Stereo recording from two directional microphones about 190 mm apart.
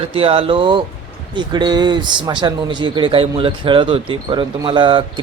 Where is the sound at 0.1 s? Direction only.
30° right (ahead or behind).